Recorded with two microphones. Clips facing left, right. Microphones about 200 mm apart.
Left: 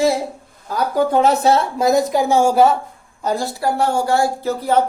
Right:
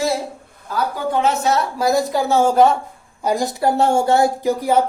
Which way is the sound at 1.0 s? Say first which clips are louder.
Left 6 dB; 40° left (ahead or behind).